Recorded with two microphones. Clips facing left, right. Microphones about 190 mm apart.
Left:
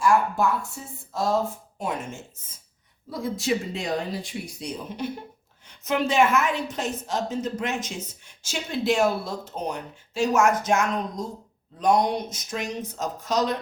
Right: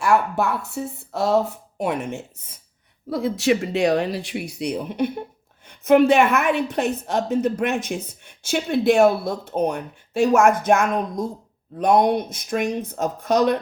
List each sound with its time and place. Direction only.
0.0 s a woman's voice: 65° right (ahead or behind)